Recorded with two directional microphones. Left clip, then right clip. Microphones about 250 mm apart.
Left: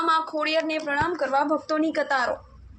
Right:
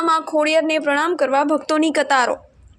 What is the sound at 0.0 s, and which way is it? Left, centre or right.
A woman's voice, right.